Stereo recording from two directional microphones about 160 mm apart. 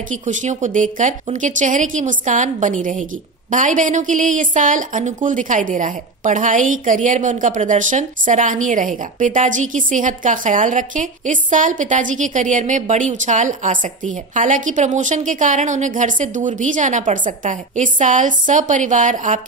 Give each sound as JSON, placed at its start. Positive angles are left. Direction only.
{"t": 0.1, "sound": "a woman's voice", "side_deg": -50}